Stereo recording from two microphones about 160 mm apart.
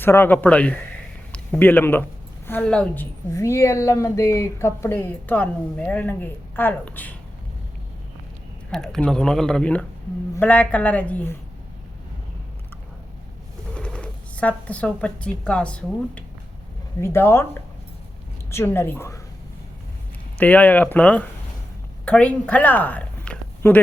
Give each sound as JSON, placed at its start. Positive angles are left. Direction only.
{"t": 0.0, "sound": "a woman's voice", "side_deg": 15}
{"t": 8.7, "sound": "a woman's voice", "side_deg": 5}
{"t": 13.7, "sound": "a woman's voice", "side_deg": 5}
{"t": 20.4, "sound": "a woman's voice", "side_deg": 10}